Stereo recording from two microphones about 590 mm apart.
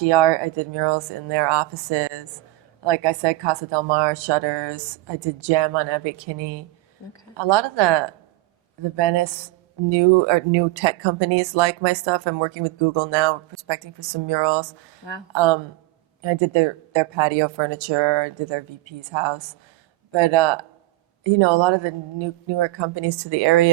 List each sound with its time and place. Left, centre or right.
0.0 s speech: right